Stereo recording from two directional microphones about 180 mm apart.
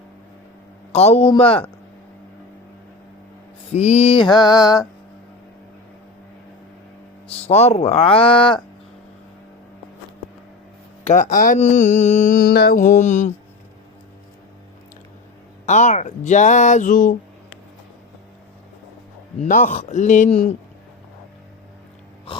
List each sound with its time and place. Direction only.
0.9 s speech: 35° left (ahead or behind)
3.7 s speech: 35° left (ahead or behind)
4.4 s music: 20° left (ahead or behind)
7.3 s speech: 35° left (ahead or behind)
11.0 s mantra: 40° left (ahead or behind)
15.6 s mantra: 45° left (ahead or behind)
19.4 s mantra: 45° left (ahead or behind)
22.3 s a sound: 30° left (ahead or behind)